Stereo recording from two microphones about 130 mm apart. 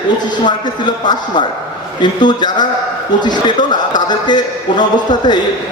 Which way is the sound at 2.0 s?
35° left (ahead or behind).